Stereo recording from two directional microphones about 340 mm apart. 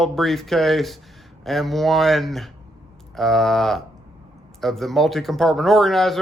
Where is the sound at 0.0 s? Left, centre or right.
Centre.